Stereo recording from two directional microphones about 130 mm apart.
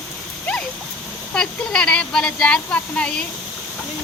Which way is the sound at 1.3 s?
5° left (ahead or behind).